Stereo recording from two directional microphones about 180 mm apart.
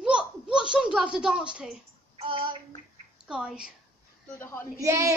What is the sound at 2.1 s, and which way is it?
Child singing, 30° right (ahead or behind).